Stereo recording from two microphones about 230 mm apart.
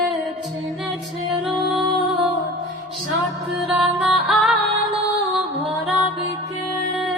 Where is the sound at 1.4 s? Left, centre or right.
Centre.